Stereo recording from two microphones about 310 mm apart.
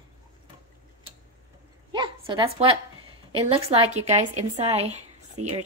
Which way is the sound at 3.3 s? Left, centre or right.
Centre.